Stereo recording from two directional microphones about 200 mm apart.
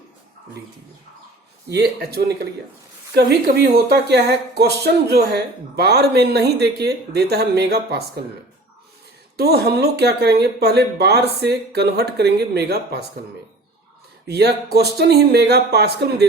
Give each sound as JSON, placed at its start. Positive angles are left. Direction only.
{"t": 1.7, "sound": "speech", "side_deg": -55}
{"t": 9.4, "sound": "speech", "side_deg": -50}
{"t": 14.3, "sound": "speech", "side_deg": -55}